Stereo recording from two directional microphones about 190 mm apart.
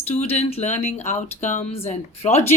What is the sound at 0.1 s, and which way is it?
Speech, 35° left (ahead or behind).